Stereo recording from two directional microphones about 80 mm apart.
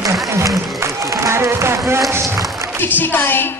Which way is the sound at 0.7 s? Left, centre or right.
Right.